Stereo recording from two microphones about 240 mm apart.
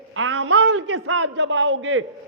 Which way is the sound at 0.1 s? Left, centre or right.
Right.